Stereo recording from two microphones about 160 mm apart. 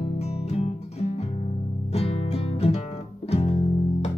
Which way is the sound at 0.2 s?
40° left (ahead or behind).